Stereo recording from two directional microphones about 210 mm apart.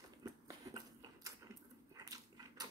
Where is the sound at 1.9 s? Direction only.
15° right (ahead or behind).